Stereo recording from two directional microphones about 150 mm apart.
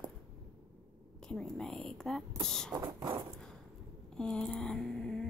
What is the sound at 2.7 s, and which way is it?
Speech, 25° right (ahead or behind).